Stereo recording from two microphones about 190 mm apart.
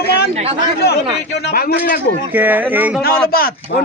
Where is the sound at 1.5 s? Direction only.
50° left (ahead or behind).